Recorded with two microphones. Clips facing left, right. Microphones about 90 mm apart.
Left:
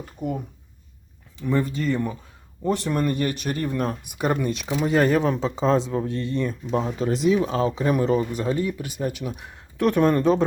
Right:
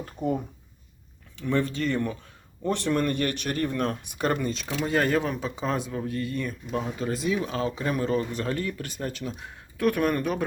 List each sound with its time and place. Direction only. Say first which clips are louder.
0.2 s speech: right 1 dB; 10° left (ahead or behind)
1.4 s speech: left 2 dB; 5° left (ahead or behind); by 10.4 s 25° left (ahead or behind)